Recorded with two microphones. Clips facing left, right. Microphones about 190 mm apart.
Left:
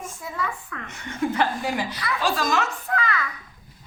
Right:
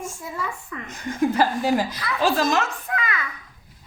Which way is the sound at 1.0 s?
35° right (ahead or behind).